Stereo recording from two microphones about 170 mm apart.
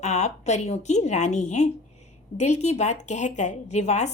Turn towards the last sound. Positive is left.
turn(degrees=40)  # may be behind; listen again after turning